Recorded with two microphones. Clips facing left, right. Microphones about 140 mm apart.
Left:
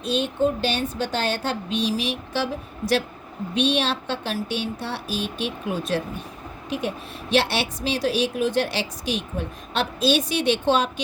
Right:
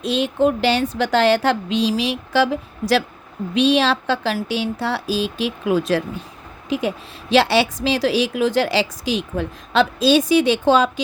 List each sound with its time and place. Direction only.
0.0 s a woman's voice: 90° right